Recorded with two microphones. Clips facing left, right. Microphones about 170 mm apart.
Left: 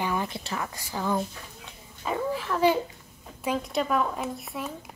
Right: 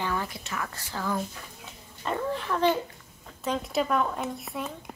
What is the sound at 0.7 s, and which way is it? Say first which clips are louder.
Speech: left 3 dB; 15° left (ahead or behind).